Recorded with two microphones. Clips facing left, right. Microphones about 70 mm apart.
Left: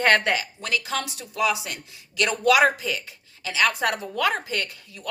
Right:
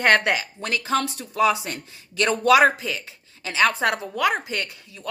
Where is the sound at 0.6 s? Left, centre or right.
Right.